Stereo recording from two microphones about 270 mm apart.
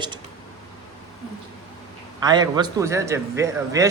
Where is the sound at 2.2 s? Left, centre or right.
Centre.